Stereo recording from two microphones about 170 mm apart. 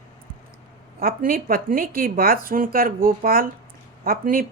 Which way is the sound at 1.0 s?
55° right (ahead or behind).